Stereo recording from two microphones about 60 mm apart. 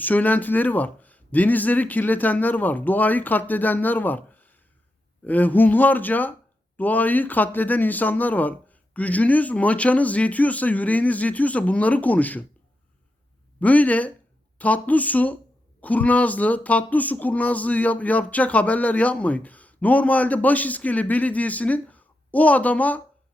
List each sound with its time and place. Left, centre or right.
0.0 s speech: left
13.6 s speech: left